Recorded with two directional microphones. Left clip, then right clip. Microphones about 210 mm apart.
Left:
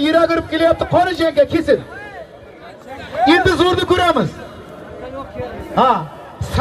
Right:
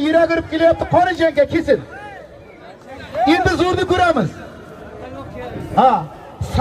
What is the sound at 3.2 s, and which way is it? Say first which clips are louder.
A man's voice: left 3 dB; 30° left (ahead or behind).